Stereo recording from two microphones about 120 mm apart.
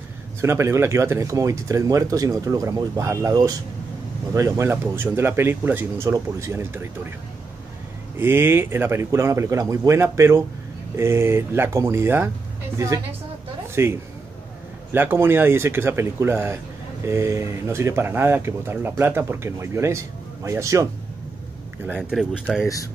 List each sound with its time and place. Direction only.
0.4 s speech: 20° right (ahead or behind)
8.2 s speech: 20° right (ahead or behind)
22.1 s speech: 5° right (ahead or behind)